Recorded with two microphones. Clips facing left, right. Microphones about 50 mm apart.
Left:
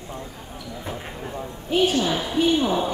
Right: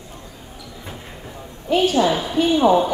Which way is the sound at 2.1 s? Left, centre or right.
Right.